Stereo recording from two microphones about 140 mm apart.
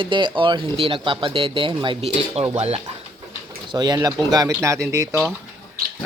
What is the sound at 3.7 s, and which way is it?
Speech, 30° right (ahead or behind).